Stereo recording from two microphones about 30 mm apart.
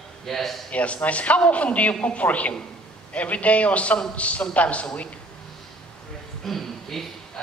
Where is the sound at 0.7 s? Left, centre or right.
Left.